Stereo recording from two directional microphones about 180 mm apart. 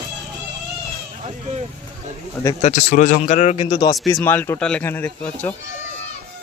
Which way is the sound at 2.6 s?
40° left (ahead or behind).